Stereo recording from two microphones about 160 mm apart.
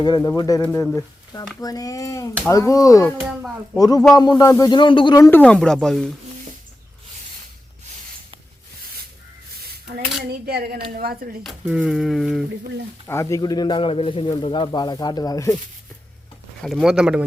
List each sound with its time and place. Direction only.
0.2 s speech: 20° left (ahead or behind)
5.4 s speech: 5° left (ahead or behind)
10.4 s speech: 75° right (ahead or behind)
11.4 s speech: centre (ahead or behind)
13.1 s speech: 20° left (ahead or behind)
16.6 s speech: centre (ahead or behind)